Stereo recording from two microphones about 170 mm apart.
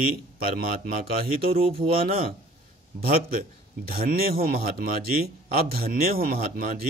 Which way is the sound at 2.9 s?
65° right (ahead or behind).